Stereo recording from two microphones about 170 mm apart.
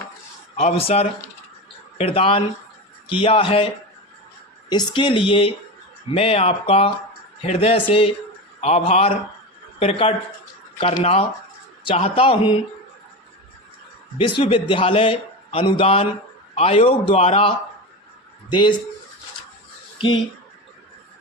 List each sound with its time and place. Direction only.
0.5 s a man's voice: 35° left (ahead or behind)
4.7 s a man's voice: 25° left (ahead or behind)
14.2 s a man's voice: 30° left (ahead or behind)
20.0 s a man's voice: 30° left (ahead or behind)